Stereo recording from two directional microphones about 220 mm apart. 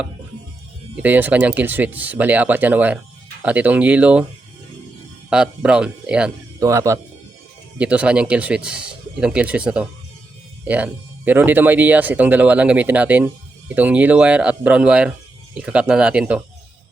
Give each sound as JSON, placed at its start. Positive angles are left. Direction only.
{"t": 1.0, "sound": "speech", "side_deg": -5}
{"t": 5.3, "sound": "speech", "side_deg": -5}